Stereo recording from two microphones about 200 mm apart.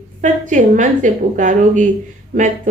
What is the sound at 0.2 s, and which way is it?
A woman's voice, 40° right (ahead or behind).